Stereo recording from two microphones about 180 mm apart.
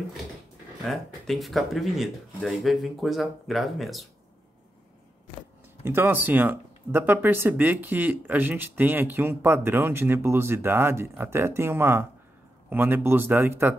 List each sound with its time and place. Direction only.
0.8 s speech: centre (ahead or behind)
5.9 s speech: 10° right (ahead or behind)